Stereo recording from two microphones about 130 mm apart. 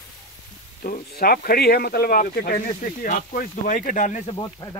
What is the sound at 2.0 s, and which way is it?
Speech, 90° left.